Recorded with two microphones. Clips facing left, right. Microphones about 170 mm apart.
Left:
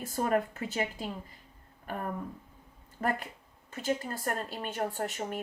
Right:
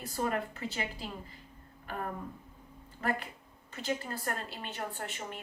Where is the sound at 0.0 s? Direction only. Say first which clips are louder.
Left 4 dB; 45° left (ahead or behind).